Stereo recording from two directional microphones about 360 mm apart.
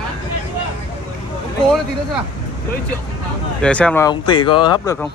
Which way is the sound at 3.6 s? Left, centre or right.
Centre.